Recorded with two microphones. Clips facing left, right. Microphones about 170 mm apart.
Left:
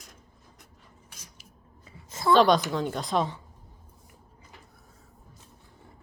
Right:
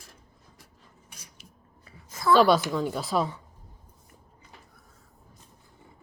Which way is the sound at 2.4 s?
5° right (ahead or behind).